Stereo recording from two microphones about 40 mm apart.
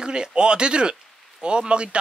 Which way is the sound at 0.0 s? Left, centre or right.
Right.